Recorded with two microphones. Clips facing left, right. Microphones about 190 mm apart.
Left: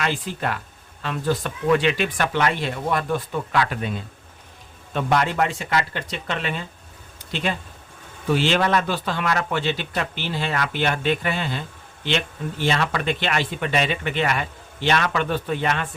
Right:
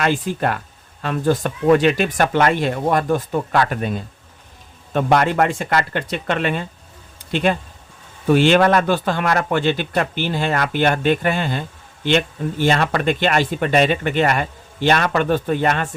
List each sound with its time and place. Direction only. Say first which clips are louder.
0.0 s speech: right 6 dB; 50° right (ahead or behind)